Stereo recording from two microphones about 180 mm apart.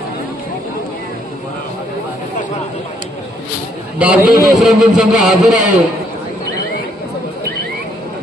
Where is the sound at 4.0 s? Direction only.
5° right (ahead or behind).